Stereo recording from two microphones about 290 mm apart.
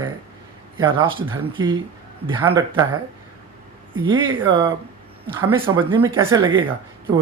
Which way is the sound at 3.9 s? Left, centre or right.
Centre.